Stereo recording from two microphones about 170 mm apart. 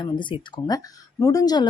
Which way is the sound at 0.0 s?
30° left (ahead or behind).